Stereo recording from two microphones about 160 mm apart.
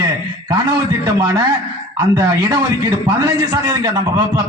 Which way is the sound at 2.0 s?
20° right (ahead or behind).